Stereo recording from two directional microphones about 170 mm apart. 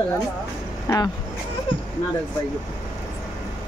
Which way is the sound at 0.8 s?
20° left (ahead or behind).